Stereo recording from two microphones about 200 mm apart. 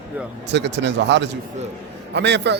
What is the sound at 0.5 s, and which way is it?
Speech, 60° right (ahead or behind).